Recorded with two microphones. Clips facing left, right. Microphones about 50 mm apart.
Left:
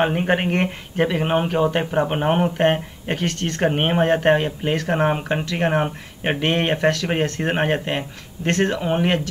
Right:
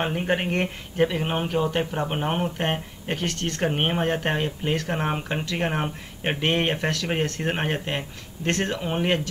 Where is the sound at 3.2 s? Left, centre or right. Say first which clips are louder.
Left 4 dB; centre.